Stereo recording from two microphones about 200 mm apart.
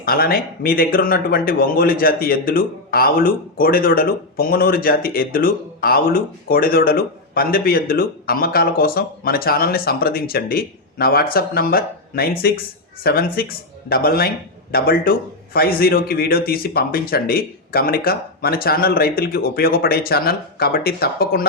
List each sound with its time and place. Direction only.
0.0 s speech: 50° left (ahead or behind)